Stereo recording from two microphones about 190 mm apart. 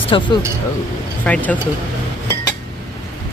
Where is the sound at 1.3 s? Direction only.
10° left (ahead or behind).